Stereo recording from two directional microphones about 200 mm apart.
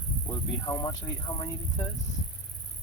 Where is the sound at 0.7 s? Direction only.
15° left (ahead or behind).